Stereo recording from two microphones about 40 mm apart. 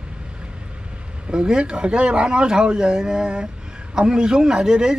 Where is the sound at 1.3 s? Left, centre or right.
Right.